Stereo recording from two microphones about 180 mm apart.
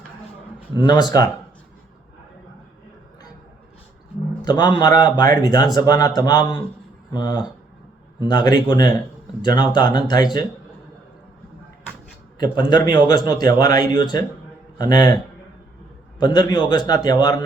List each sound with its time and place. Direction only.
0.8 s a man's voice: 25° left (ahead or behind)
4.4 s a man's voice: 25° left (ahead or behind)
12.4 s a man's voice: 25° left (ahead or behind)